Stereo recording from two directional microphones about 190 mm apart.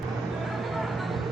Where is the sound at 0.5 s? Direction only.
Centre (ahead or behind).